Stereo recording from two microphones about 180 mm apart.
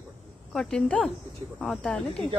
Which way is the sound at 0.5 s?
5° left (ahead or behind).